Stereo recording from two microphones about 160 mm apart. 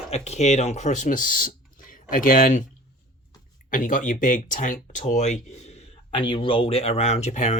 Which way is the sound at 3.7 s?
55° left (ahead or behind).